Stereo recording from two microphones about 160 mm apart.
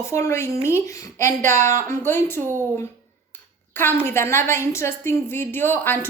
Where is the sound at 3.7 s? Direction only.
15° left (ahead or behind).